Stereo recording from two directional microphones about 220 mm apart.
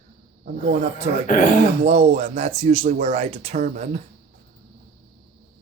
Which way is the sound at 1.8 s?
30° right (ahead or behind).